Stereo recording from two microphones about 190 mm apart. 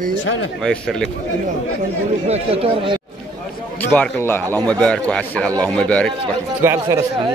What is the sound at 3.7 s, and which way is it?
A man's voice, 10° left (ahead or behind).